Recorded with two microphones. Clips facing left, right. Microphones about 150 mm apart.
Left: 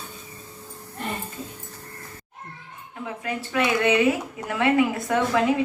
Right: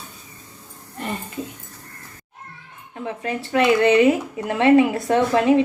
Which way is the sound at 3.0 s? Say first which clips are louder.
Right 4 dB; 30° right (ahead or behind).